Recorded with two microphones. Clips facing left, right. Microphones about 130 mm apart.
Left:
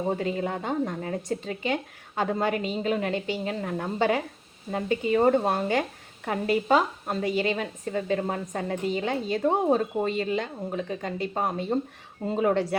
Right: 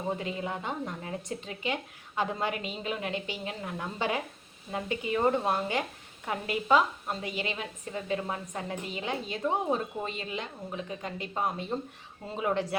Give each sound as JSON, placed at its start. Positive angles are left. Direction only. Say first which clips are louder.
{"t": 0.1, "sound": "speech", "louder": "left 6 dB", "side_deg": 45}